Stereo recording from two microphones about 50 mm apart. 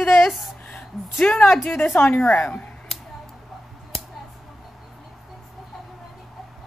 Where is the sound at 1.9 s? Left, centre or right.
Left.